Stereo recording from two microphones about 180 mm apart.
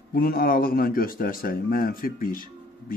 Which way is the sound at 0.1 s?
55° left (ahead or behind).